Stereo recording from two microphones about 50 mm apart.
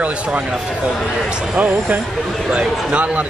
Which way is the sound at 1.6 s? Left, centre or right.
Right.